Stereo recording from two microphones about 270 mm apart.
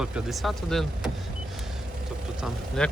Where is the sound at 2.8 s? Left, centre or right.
Centre.